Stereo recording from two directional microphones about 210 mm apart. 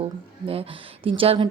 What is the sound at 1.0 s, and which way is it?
Speech, 25° right (ahead or behind).